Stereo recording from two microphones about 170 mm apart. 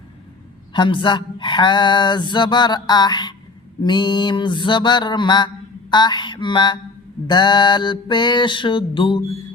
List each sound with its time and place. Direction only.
0.7 s speech: 30° left (ahead or behind)